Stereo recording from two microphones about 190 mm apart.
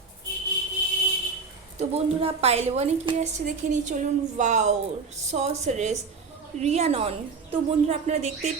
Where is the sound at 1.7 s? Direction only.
30° right (ahead or behind).